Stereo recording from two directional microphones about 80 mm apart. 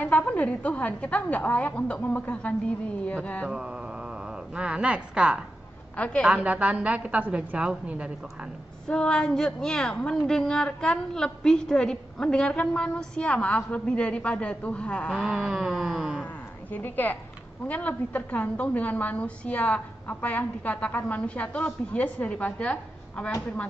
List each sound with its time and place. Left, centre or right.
0.0 s a woman's voice: centre
4.6 s a woman's voice: centre
5.9 s a woman's voice: centre
6.2 s a woman's voice: centre
8.8 s a woman's voice: centre
15.2 s a woman's voice: centre
16.7 s a woman's voice: left